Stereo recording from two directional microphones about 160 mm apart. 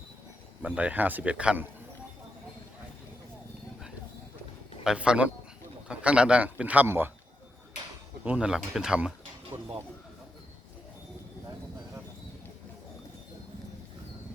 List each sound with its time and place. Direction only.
0.6 s a man's voice: 10° right (ahead or behind)
4.8 s a man's voice: 5° right (ahead or behind)
8.2 s speech: 10° right (ahead or behind)
9.5 s speech: 25° right (ahead or behind)